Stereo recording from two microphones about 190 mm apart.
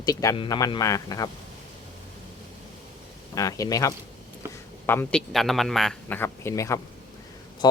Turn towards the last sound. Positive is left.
turn(degrees=20)  # may be behind; listen again after turning